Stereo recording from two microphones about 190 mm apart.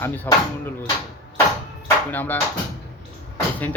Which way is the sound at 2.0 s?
10° left (ahead or behind).